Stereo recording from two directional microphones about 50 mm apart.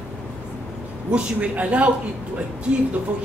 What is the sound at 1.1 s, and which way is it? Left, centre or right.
Speech, right.